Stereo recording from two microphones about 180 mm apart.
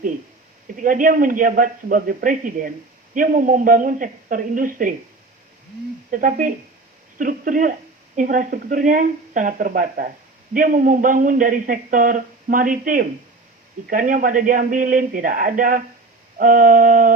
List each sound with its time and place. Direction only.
0.8 s a woman's voice: 50° right (ahead or behind)
6.1 s a woman's voice: 50° right (ahead or behind)